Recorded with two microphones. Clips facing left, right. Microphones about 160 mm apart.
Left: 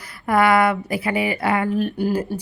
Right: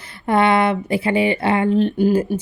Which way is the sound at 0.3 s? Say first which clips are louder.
Right 1 dB; 25° right (ahead or behind).